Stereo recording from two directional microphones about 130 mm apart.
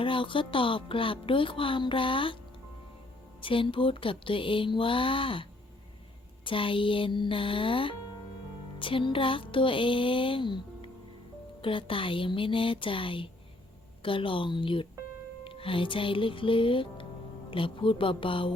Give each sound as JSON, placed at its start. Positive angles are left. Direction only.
{"t": 0.0, "sound": "speech", "side_deg": 40}
{"t": 3.4, "sound": "a sound", "side_deg": 40}
{"t": 6.4, "sound": "speech", "side_deg": 40}
{"t": 11.6, "sound": "speech", "side_deg": 40}
{"t": 15.4, "sound": "music", "side_deg": 45}
{"t": 17.5, "sound": "speech", "side_deg": 40}